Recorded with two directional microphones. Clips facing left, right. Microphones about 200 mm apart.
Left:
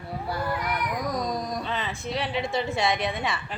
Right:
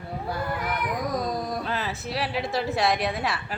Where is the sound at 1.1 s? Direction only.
5° right (ahead or behind).